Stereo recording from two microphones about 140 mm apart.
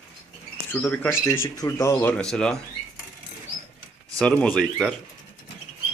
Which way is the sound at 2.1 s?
5° left (ahead or behind).